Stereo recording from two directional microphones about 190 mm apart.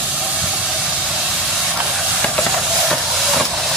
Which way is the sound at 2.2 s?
Centre (ahead or behind).